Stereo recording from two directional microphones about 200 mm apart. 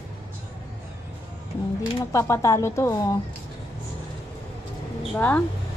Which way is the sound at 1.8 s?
15° left (ahead or behind).